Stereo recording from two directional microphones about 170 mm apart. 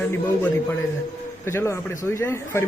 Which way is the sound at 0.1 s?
15° left (ahead or behind).